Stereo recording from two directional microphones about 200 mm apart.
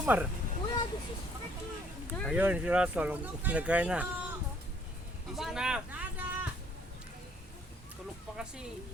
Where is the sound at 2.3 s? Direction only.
5° right (ahead or behind).